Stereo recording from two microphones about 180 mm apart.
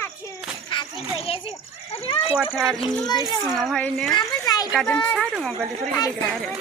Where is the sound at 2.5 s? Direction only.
5° left (ahead or behind).